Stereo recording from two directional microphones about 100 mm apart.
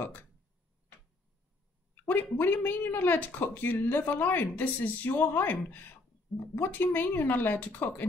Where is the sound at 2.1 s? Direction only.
20° left (ahead or behind).